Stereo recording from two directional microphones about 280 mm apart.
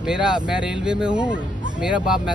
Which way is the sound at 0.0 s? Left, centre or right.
Centre.